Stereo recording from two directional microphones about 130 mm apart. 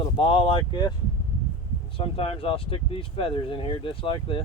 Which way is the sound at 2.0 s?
45° left (ahead or behind).